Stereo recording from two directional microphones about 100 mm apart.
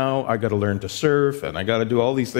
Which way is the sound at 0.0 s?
15° left (ahead or behind).